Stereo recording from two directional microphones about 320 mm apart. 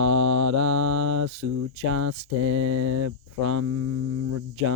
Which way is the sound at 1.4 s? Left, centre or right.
Right.